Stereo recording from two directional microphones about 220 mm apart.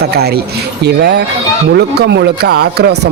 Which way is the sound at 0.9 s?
50° right (ahead or behind).